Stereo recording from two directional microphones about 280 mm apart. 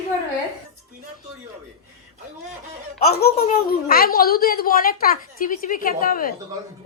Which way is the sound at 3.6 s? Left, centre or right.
Left.